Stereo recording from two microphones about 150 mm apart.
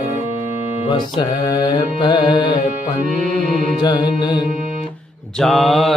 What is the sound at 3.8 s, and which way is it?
Music, 30° left (ahead or behind).